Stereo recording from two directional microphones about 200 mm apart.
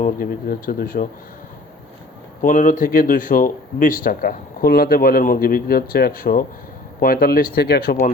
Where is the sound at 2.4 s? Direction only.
40° left (ahead or behind).